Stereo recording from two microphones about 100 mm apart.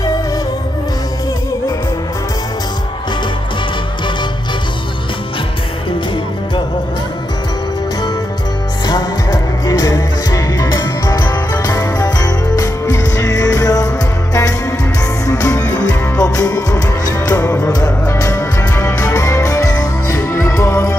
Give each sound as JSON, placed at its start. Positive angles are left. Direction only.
{"t": 8.8, "sound": "music", "side_deg": 40}
{"t": 15.2, "sound": "music", "side_deg": 35}
{"t": 17.3, "sound": "music", "side_deg": 25}
{"t": 17.7, "sound": "music", "side_deg": 40}